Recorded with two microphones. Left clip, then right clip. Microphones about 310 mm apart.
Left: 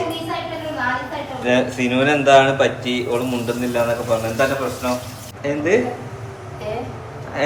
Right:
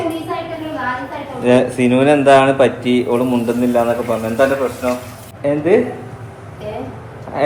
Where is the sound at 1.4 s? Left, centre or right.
Centre.